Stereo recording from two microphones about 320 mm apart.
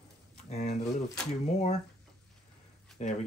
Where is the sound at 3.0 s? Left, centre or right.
Left.